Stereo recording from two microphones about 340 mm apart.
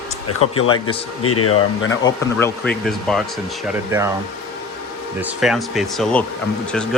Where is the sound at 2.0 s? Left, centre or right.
Centre.